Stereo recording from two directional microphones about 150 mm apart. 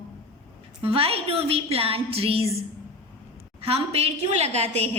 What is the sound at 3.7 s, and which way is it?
A woman's voice, 40° right (ahead or behind).